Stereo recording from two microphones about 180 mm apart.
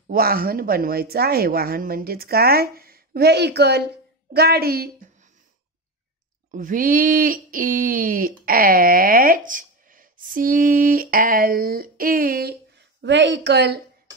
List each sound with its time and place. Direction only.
0.1 s a woman's voice: 55° right (ahead or behind)
6.5 s speech: 50° right (ahead or behind)
13.0 s a woman's voice: 75° right (ahead or behind)